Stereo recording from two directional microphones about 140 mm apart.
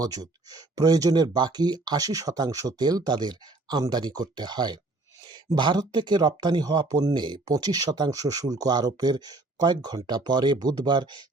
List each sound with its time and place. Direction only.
0.0 s speech: 25° right (ahead or behind)